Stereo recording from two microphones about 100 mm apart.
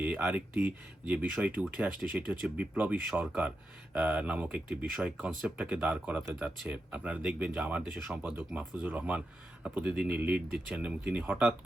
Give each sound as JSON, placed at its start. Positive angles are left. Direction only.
{"t": 0.0, "sound": "speech", "side_deg": -15}